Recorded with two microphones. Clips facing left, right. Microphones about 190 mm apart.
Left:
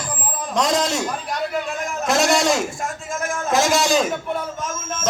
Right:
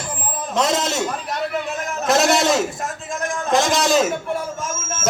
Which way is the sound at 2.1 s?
Centre (ahead or behind).